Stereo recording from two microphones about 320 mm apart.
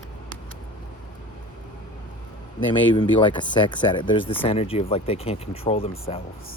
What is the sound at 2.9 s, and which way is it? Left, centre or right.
Speech, centre.